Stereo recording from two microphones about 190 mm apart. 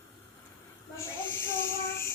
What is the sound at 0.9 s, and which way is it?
Child singing, 10° left (ahead or behind).